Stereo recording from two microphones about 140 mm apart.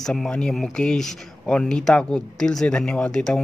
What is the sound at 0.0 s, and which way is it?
Speech, 5° left (ahead or behind).